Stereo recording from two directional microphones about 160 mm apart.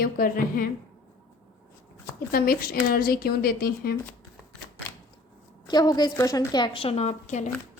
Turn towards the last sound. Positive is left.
turn(degrees=50)  # may be behind; listen again after turning